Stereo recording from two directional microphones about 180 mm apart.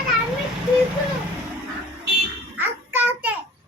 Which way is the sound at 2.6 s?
10° right (ahead or behind).